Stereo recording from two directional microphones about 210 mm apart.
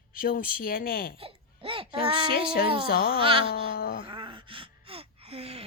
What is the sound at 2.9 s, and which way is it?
Speech, 45° left (ahead or behind).